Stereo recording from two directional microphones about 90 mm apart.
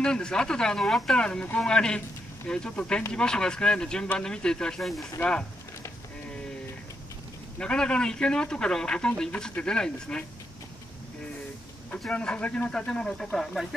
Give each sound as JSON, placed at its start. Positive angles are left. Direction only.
{"t": 0.0, "sound": "speech", "side_deg": 10}
{"t": 7.5, "sound": "speech", "side_deg": 10}
{"t": 12.0, "sound": "speech", "side_deg": 10}